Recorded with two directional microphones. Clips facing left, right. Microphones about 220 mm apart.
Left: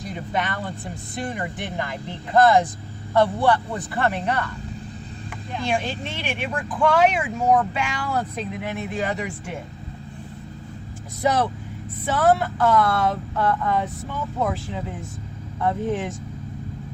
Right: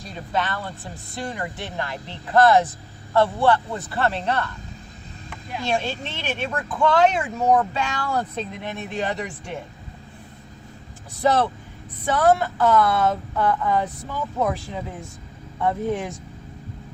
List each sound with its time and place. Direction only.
0.0 s speech: 15° left (ahead or behind)
5.6 s speech: 15° left (ahead or behind)
11.2 s speech: 10° left (ahead or behind)